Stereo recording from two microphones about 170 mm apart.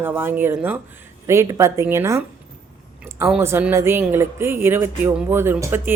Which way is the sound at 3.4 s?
15° right (ahead or behind).